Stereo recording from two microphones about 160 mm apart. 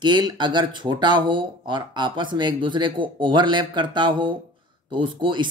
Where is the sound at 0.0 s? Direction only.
30° right (ahead or behind).